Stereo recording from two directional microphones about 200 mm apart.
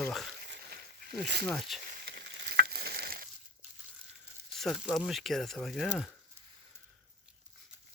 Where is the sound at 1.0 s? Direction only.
55° right (ahead or behind).